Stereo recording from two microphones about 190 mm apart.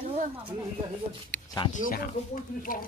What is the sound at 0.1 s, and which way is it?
Speech, 35° right (ahead or behind).